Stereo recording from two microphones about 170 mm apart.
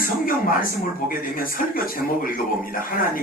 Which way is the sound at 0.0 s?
55° left (ahead or behind).